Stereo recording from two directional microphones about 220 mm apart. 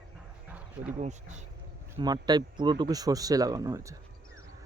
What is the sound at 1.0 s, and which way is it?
Speech, 30° right (ahead or behind).